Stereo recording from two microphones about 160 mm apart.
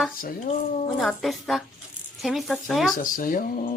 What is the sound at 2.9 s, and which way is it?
Speech, 60° left (ahead or behind).